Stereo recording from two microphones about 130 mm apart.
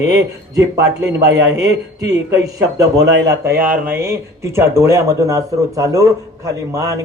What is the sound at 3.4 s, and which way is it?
A man's voice, 15° right (ahead or behind).